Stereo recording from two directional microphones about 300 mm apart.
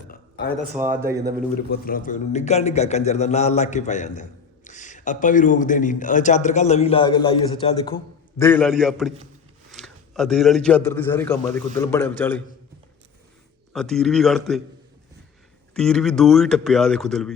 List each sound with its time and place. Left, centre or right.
0.1 s a sound: left
1.0 s a man's voice: centre
1.7 s a man's voice: left; by 12.4 s centre
13.7 s speech: centre
15.7 s speech: centre